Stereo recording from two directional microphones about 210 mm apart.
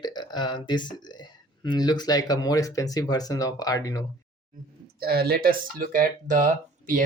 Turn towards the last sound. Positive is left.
turn(degrees=-40)  # may be behind; listen again after turning